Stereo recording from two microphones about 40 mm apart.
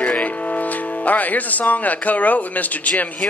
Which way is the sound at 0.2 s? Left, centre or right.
Left.